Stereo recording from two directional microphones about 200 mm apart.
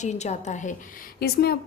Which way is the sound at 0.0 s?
35° left (ahead or behind).